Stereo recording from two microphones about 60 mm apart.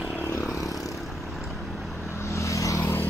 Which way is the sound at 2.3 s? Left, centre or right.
Left.